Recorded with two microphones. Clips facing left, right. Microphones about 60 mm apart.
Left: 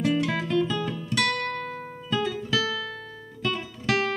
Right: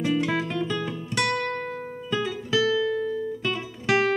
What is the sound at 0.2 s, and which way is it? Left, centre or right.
Music, centre.